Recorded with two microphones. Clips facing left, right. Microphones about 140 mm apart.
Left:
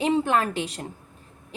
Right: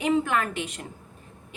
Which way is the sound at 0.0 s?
30° left (ahead or behind).